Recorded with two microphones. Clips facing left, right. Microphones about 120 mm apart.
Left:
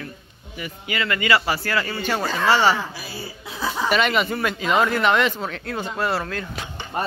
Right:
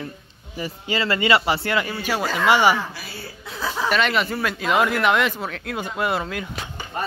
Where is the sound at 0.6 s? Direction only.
30° right (ahead or behind).